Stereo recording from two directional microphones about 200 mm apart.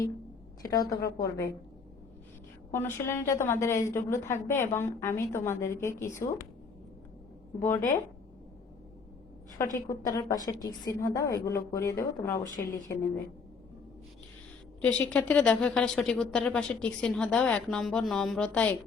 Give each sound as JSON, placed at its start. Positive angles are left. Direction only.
{"t": 0.6, "sound": "a woman's voice", "side_deg": 20}
{"t": 2.7, "sound": "a woman's voice", "side_deg": 15}
{"t": 9.6, "sound": "a woman's voice", "side_deg": 15}
{"t": 14.8, "sound": "speech", "side_deg": 5}